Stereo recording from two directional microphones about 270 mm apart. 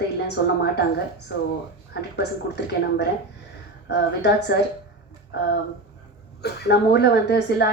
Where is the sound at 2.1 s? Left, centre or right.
Left.